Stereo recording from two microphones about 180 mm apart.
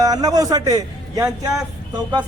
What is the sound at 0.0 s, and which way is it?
A man's voice, 20° right (ahead or behind).